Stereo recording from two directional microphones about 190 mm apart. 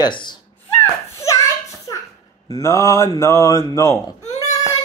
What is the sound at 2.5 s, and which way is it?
Speech, 15° left (ahead or behind).